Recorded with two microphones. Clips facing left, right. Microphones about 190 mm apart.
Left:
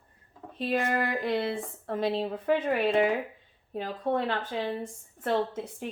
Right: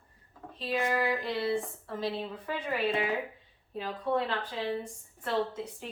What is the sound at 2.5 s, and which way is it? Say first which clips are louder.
Speech: left 6 dB; 50° left (ahead or behind).